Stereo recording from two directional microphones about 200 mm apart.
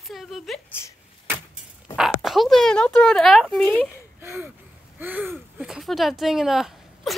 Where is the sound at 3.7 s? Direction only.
10° right (ahead or behind).